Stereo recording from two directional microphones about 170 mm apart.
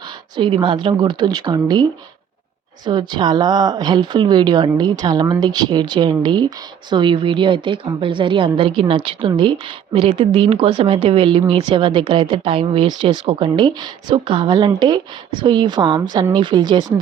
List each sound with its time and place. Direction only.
0.3 s a woman's voice: 30° right (ahead or behind)